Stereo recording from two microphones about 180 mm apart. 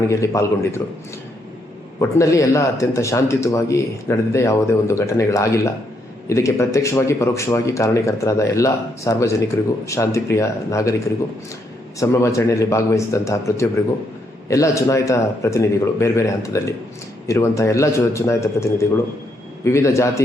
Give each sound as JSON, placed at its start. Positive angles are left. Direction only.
{"t": 0.1, "sound": "speech", "side_deg": 15}
{"t": 2.0, "sound": "speech", "side_deg": 15}
{"t": 11.9, "sound": "speech", "side_deg": 15}